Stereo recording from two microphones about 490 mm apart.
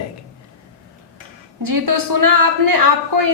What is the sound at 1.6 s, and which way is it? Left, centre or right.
A woman's voice, right.